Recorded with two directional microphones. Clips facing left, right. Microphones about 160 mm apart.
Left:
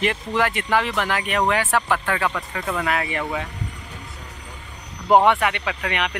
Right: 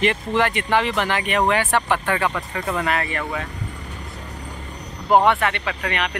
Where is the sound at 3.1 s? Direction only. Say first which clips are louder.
Left 1 dB; 15° left (ahead or behind).